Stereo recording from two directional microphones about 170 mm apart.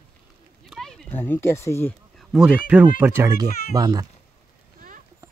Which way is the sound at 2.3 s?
5° right (ahead or behind).